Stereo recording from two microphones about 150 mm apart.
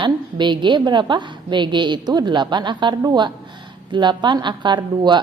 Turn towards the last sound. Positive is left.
turn(degrees=-30)  # may be behind; listen again after turning